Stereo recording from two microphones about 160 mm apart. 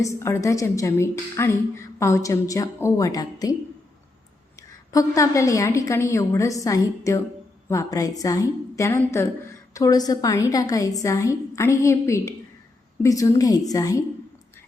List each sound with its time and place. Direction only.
0.0 s a woman's voice: 20° left (ahead or behind)
4.9 s a woman's voice: 20° left (ahead or behind)